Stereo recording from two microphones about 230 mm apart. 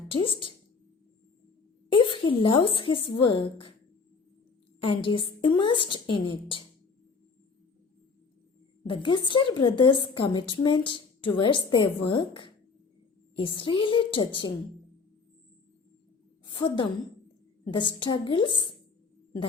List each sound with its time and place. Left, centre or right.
0.1 s a woman's voice: left
1.9 s a woman's voice: left
4.9 s a woman's voice: left
8.8 s a woman's voice: left
16.5 s a woman's voice: left